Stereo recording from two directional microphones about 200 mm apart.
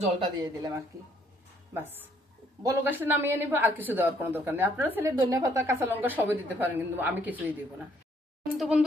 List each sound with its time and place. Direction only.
0.2 s a woman's voice: 20° right (ahead or behind)
8.5 s speech: 5° right (ahead or behind)